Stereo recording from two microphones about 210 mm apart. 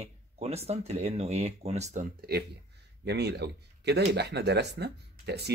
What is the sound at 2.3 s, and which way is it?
Speech, 45° right (ahead or behind).